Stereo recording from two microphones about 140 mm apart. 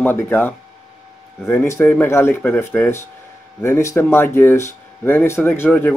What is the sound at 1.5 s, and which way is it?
Speech, 15° left (ahead or behind).